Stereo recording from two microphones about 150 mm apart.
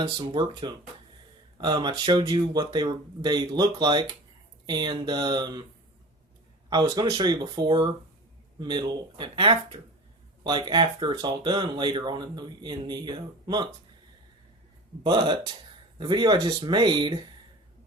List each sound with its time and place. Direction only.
0.0 s speech: 35° right (ahead or behind)
6.7 s speech: 30° right (ahead or behind)
15.0 s speech: 30° right (ahead or behind)